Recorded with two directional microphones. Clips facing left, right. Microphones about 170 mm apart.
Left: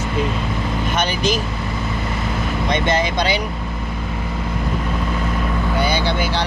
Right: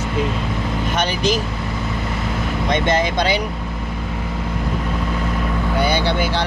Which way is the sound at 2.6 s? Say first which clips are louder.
Right 1 dB; 50° right (ahead or behind).